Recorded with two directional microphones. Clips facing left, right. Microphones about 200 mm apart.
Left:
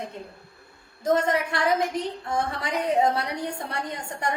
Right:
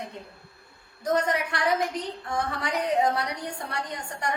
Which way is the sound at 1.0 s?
25° left (ahead or behind).